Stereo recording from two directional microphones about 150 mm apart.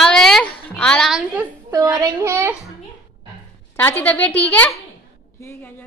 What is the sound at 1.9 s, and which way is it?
Speech, 20° right (ahead or behind).